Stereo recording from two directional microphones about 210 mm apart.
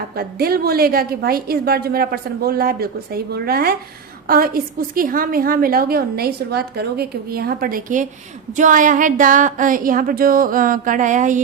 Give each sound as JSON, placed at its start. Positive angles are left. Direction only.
{"t": 0.2, "sound": "a woman's voice", "side_deg": -45}